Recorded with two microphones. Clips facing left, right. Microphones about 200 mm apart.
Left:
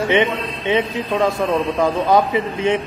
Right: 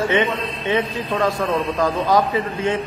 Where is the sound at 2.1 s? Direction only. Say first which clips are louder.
Left 2 dB; 20° left (ahead or behind).